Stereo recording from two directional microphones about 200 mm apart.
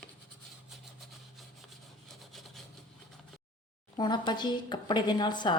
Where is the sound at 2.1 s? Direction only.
Centre (ahead or behind).